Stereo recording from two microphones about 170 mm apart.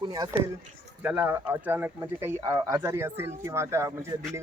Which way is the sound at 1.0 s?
10° right (ahead or behind).